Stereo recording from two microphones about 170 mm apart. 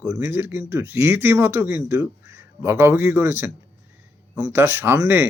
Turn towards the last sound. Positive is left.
turn(degrees=-15)  # may be behind; listen again after turning